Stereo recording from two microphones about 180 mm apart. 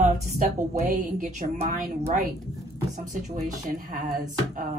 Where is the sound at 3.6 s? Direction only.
45° right (ahead or behind).